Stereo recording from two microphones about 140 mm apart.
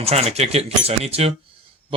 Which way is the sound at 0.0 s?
50° right (ahead or behind).